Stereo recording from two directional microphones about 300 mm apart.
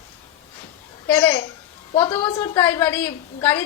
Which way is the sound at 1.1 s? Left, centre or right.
Centre.